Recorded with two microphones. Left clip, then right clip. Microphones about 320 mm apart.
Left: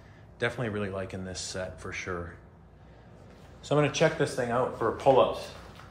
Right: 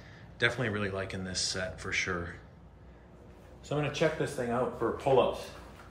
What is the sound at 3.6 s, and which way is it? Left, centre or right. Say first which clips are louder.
Speech: left 5 dB; centre.